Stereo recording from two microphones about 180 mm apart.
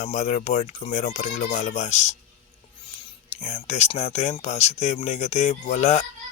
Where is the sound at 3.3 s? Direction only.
35° left (ahead or behind).